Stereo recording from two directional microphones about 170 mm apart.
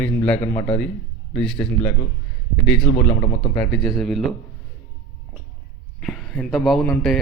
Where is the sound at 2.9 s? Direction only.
45° left (ahead or behind).